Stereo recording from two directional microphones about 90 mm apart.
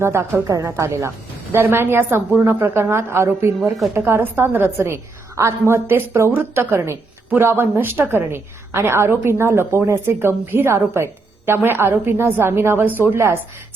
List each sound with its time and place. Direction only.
0.0 s a woman's voice: 30° right (ahead or behind)